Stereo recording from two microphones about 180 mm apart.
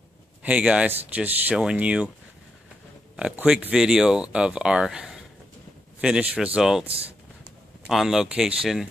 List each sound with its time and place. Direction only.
0.4 s speech: 5° right (ahead or behind)
3.2 s speech: 5° right (ahead or behind)
6.9 s speech: 35° right (ahead or behind)
7.8 s speech: centre (ahead or behind)